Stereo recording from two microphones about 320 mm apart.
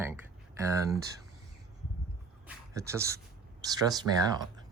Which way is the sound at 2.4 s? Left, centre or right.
Centre.